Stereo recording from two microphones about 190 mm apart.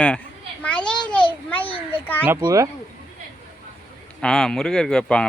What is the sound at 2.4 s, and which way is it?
Speech, 15° right (ahead or behind).